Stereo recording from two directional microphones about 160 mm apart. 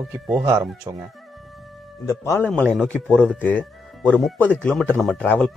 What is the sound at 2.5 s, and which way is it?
Speech, 5° left (ahead or behind).